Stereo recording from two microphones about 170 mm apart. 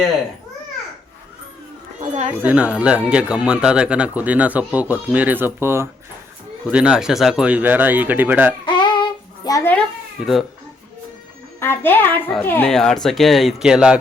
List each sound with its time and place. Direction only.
2.0 s speech: 40° right (ahead or behind)
2.4 s speech: 5° right (ahead or behind)
8.6 s child singing: 25° left (ahead or behind)
11.6 s a child's voice: 15° left (ahead or behind); by 14.0 s 5° right (ahead or behind)